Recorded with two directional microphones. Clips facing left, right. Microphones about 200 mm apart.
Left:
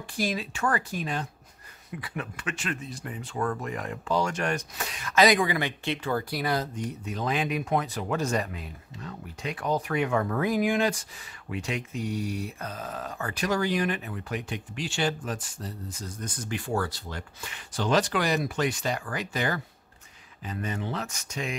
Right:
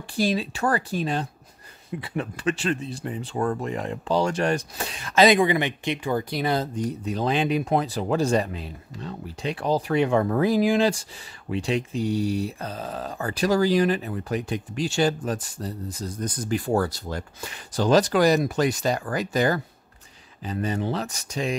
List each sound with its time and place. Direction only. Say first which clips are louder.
0.2 s speech: right 5 dB; 30° right (ahead or behind)